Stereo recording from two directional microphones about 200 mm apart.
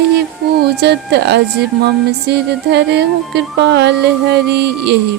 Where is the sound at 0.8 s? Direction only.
55° right (ahead or behind).